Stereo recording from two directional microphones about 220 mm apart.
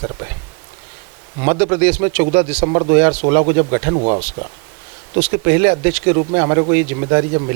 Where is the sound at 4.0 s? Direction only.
35° right (ahead or behind).